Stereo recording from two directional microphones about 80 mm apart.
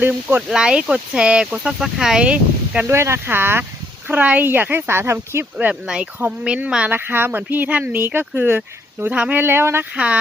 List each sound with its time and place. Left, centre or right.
0.0 s speech: right
0.4 s speech: centre
2.8 s speech: right
5.8 s speech: centre
6.9 s speech: right
9.9 s speech: centre